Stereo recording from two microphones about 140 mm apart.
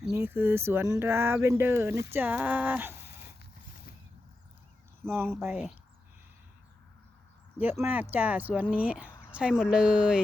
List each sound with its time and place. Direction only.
0.2 s speech: 15° right (ahead or behind)
5.0 s speech: 15° right (ahead or behind)
7.6 s speech: 15° right (ahead or behind)